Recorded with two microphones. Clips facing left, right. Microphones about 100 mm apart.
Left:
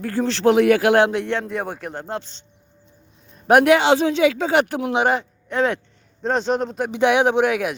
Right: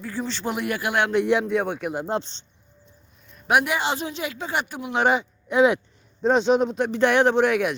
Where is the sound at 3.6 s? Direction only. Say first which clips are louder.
Left 10 dB; 80° left.